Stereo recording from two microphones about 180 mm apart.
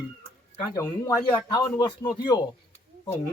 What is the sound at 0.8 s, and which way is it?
Speech, 20° left (ahead or behind).